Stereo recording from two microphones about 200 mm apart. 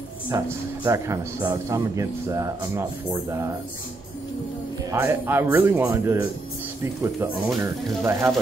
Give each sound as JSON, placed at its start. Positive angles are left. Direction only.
{"t": 0.3, "sound": "a man's voice", "side_deg": -15}
{"t": 4.9, "sound": "a man's voice", "side_deg": -10}